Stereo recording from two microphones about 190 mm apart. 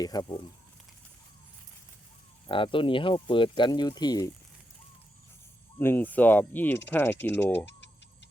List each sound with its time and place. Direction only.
0.0 s speech: 20° left (ahead or behind)
2.5 s speech: 25° left (ahead or behind)
5.8 s speech: 10° left (ahead or behind)
7.6 s clock: 65° left (ahead or behind)